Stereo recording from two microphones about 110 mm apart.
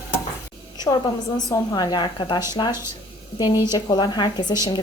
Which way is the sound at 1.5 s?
35° left (ahead or behind).